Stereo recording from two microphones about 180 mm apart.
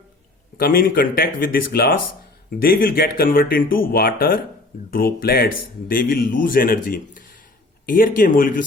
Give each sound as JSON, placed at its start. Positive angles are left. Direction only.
{"t": 0.5, "sound": "speech", "side_deg": 55}